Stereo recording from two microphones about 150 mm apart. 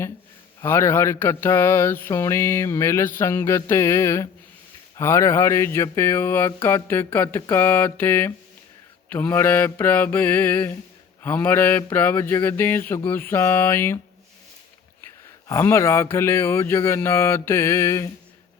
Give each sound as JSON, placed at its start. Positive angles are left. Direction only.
{"t": 0.6, "sound": "mantra", "side_deg": 15}
{"t": 15.0, "sound": "mantra", "side_deg": 15}